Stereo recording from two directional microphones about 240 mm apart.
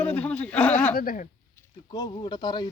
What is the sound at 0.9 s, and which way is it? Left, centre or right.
Speech, left.